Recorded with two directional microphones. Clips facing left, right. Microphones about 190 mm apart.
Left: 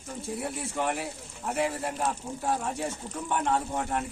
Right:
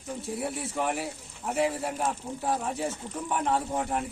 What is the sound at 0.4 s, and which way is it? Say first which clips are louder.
Speech: right 1 dB; centre (ahead or behind).